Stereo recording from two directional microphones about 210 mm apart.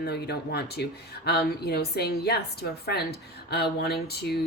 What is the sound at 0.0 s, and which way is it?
Speech, 50° left (ahead or behind).